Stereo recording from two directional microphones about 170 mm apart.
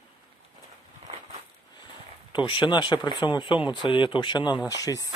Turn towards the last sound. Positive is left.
turn(degrees=20)  # may be behind; listen again after turning